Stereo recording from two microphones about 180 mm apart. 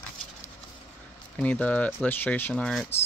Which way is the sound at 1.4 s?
10° left (ahead or behind).